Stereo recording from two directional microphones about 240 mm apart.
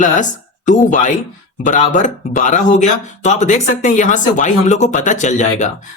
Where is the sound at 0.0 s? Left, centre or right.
Left.